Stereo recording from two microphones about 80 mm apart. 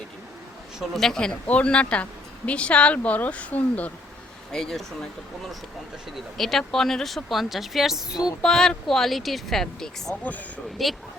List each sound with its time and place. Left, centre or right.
0.9 s speech: centre
4.5 s speech: centre
6.3 s speech: centre
8.4 s speech: centre